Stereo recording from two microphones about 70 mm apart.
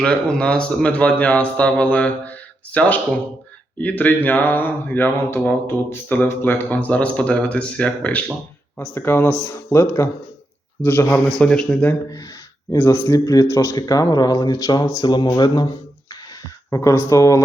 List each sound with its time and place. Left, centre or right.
0.0 s speech: centre
6.7 s speech: centre
9.0 s speech: left
11.3 s speech: centre
12.7 s speech: left
13.1 s speech: left
13.5 s speech: left
13.7 s speech: left
15.0 s speech: left
16.6 s a man's voice: left